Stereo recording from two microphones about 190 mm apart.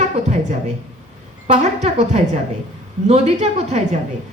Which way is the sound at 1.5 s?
35° right (ahead or behind).